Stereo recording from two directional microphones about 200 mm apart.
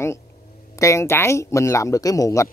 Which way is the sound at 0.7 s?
15° left (ahead or behind).